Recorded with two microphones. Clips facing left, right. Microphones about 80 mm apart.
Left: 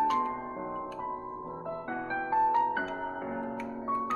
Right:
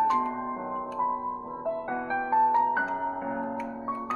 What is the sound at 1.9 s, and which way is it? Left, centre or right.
Music, right.